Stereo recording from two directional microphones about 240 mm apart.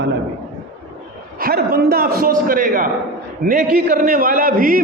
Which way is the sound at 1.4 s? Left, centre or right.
Right.